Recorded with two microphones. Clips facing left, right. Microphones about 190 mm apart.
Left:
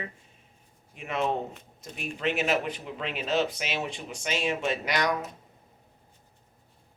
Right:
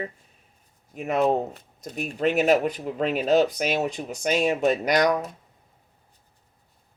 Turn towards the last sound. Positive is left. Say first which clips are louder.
# right 7 dB
turn(degrees=-40)  # may be behind; listen again after turning